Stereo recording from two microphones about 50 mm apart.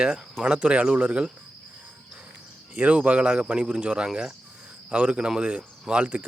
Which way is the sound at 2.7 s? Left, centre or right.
Right.